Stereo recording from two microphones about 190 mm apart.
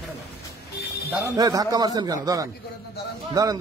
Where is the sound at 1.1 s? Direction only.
15° right (ahead or behind).